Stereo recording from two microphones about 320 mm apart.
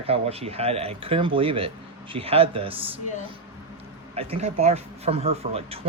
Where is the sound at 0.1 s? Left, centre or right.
Centre.